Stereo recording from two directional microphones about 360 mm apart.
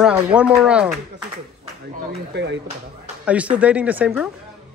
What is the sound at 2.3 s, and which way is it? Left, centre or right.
Speech, right.